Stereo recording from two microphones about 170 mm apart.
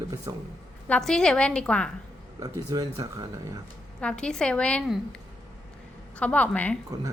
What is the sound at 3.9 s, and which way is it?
A woman's voice, 5° left (ahead or behind).